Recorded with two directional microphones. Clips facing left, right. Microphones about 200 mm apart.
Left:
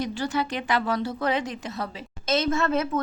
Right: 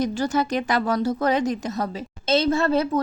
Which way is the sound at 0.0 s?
45° right (ahead or behind).